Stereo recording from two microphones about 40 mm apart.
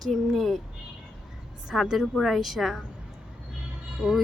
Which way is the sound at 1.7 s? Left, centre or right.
Centre.